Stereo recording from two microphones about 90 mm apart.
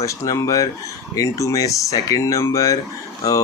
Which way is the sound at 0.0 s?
35° left (ahead or behind).